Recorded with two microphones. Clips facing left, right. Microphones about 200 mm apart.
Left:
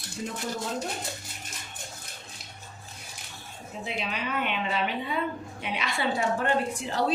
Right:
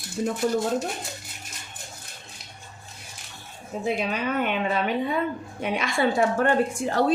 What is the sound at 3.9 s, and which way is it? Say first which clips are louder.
A woman's voice: right 7 dB; 45° right (ahead or behind).